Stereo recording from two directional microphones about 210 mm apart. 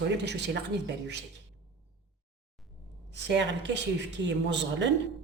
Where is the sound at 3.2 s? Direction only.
60° right (ahead or behind).